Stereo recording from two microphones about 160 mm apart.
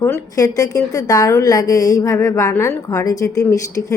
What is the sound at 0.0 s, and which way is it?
A woman's voice, 15° left (ahead or behind).